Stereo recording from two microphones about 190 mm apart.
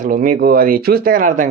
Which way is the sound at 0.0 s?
45° right (ahead or behind).